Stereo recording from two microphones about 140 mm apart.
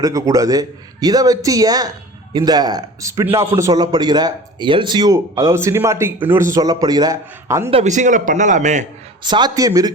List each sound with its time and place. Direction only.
0.0 s a man's voice: 25° right (ahead or behind)
7.7 s a man's voice: 55° right (ahead or behind)
9.2 s a man's voice: 30° right (ahead or behind)